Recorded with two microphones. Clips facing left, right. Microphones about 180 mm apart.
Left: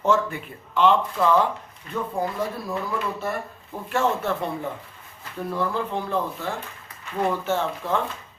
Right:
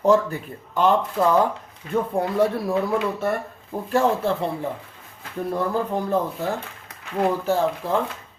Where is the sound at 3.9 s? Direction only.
30° right (ahead or behind).